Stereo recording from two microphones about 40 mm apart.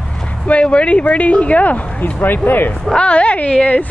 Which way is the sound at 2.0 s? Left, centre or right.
Left.